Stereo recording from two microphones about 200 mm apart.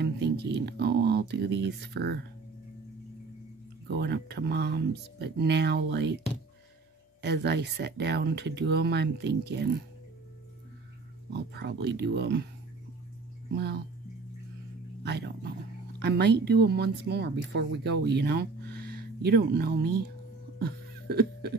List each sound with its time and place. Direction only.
0.0 s speech: 55° right (ahead or behind)
3.8 s speech: 55° right (ahead or behind)
7.2 s speech: 60° right (ahead or behind)
11.2 s speech: 55° right (ahead or behind)
13.5 s speech: 55° right (ahead or behind)
15.0 s speech: 55° right (ahead or behind)
20.5 s a sound: 50° right (ahead or behind)